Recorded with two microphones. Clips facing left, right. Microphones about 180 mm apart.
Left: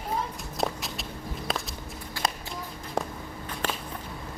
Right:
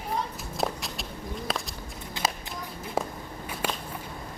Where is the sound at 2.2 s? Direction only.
20° right (ahead or behind).